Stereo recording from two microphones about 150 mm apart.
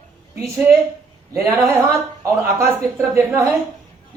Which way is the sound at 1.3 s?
20° right (ahead or behind).